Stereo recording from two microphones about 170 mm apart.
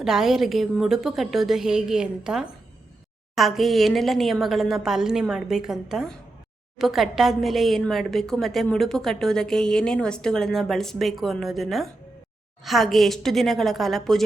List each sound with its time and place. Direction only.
0.0 s speech: centre (ahead or behind)